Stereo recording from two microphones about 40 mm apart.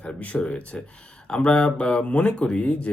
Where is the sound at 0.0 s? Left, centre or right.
Left.